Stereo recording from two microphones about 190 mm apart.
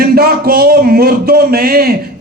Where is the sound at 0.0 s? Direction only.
50° right (ahead or behind).